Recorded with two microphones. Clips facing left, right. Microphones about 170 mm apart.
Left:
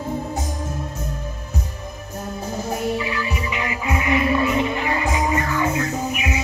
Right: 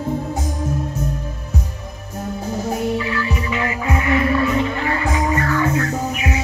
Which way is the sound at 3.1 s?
20° left (ahead or behind).